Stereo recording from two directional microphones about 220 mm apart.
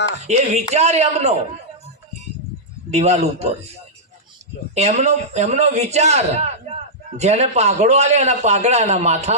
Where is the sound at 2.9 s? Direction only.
30° right (ahead or behind).